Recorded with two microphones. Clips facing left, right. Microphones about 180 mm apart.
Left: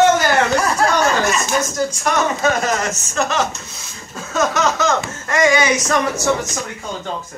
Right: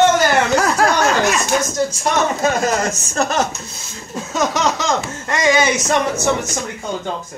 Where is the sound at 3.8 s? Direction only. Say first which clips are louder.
Right 4 dB; 20° right (ahead or behind).